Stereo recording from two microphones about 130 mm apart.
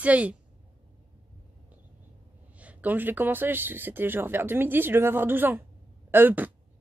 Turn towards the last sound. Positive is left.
turn(degrees=-15)  # may be behind; listen again after turning